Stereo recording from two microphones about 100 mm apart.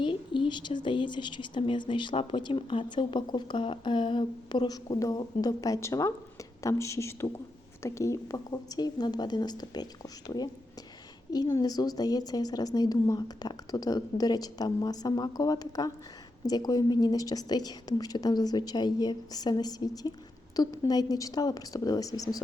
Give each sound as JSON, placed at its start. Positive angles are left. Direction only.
{"t": 0.0, "sound": "a woman's voice", "side_deg": 55}